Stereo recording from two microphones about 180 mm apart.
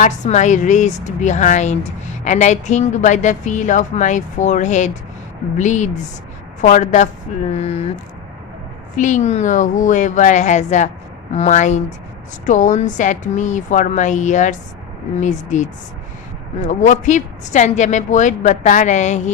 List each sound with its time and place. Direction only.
0.0 s a woman's voice: 40° left (ahead or behind)
9.0 s a woman's voice: 45° left (ahead or behind)